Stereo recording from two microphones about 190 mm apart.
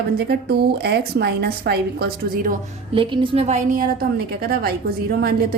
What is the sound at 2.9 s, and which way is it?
A woman's voice, 25° right (ahead or behind).